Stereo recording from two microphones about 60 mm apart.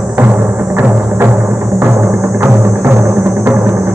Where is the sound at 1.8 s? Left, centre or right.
Right.